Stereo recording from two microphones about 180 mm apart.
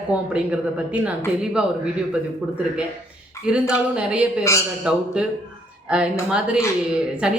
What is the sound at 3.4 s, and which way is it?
A man's voice, 5° right (ahead or behind).